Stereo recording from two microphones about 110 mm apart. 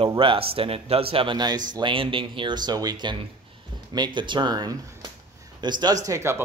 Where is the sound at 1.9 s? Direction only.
50° right (ahead or behind); by 6.4 s 25° right (ahead or behind).